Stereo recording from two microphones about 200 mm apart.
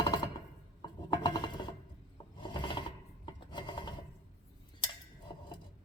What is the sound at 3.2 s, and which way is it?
Filing, 20° left (ahead or behind).